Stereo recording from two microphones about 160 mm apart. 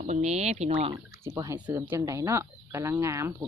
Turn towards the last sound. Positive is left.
turn(degrees=-20)  # may be behind; listen again after turning